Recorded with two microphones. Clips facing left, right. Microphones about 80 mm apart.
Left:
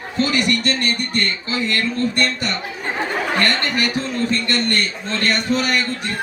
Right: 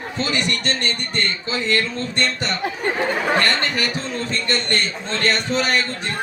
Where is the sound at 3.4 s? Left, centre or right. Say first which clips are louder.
Left 1 dB; right.